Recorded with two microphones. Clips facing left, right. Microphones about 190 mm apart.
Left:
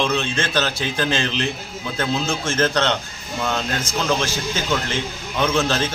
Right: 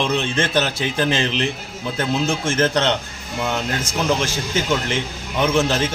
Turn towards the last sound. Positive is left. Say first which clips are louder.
# right 2 dB
turn(degrees=-20)  # may be behind; listen again after turning